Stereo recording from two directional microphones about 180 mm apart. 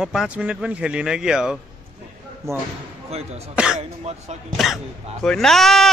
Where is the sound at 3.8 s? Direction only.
35° right (ahead or behind).